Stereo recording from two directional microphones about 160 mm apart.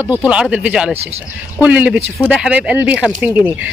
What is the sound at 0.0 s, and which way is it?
Speech, 10° right (ahead or behind).